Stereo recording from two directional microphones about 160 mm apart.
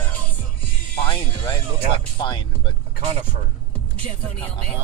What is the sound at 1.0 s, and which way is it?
Music, 30° left (ahead or behind).